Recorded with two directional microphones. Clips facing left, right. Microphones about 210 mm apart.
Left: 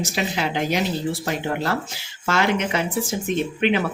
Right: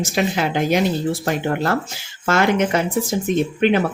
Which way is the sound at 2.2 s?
50° right (ahead or behind).